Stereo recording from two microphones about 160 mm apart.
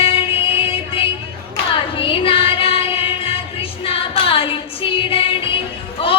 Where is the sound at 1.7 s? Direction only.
35° left (ahead or behind).